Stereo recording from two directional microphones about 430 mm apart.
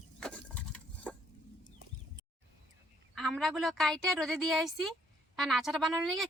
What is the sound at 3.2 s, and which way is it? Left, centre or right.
A woman's voice, centre.